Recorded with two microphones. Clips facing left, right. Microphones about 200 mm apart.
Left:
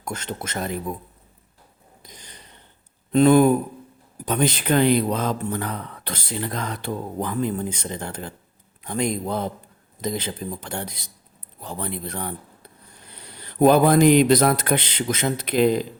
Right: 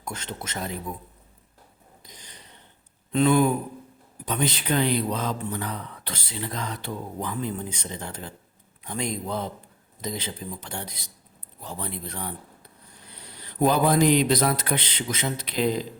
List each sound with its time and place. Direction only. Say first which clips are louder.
0.0 s speech: left 4 dB; 50° left (ahead or behind)
3.1 s speech: left 6 dB; 45° left (ahead or behind)
13.6 s speech: left 5 dB; 55° left (ahead or behind)